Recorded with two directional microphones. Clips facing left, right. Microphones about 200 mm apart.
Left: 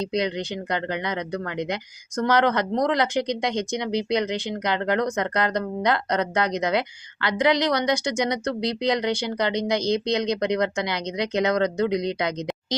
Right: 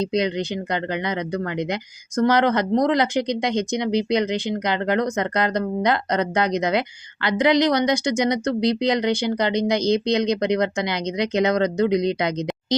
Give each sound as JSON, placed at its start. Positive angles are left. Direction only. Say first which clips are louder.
{"t": 0.0, "sound": "speech", "louder": "right 3 dB", "side_deg": -20}